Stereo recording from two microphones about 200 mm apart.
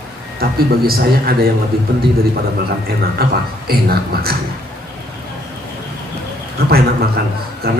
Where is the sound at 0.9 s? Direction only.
50° right (ahead or behind).